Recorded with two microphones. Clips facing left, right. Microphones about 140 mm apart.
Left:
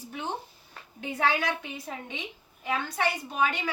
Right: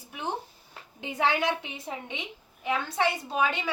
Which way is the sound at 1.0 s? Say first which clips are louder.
Right 1 dB; 20° right (ahead or behind).